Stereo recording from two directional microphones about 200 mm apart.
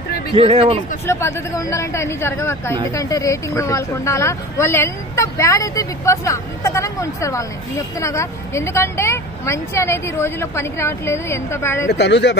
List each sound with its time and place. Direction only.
0.3 s speech: 30° right (ahead or behind)
1.0 s speech: 15° left (ahead or behind)
11.9 s speech: 55° left (ahead or behind)